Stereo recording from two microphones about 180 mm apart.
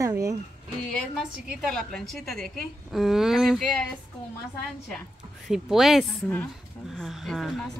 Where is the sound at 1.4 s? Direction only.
Centre (ahead or behind).